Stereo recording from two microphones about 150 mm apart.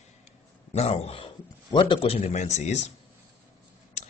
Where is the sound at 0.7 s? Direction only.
45° left (ahead or behind).